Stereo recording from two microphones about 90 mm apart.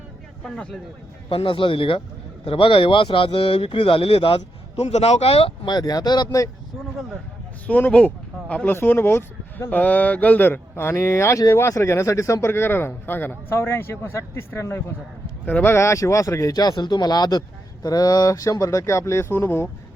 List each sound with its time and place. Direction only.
0.5 s speech: 5° left (ahead or behind)
1.3 s speech: 70° left (ahead or behind)
2.4 s speech: 85° left
5.6 s speech: 50° left (ahead or behind)
7.7 s speech: 15° left (ahead or behind)